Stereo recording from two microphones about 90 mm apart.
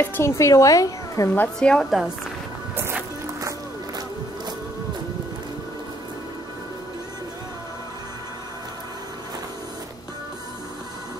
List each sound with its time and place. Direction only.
0.0 s a woman's voice: 25° left (ahead or behind)
1.6 s a woman's voice: 10° left (ahead or behind)
2.7 s music: 25° right (ahead or behind)